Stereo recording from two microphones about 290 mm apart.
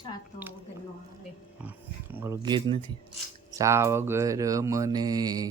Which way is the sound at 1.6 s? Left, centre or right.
Centre.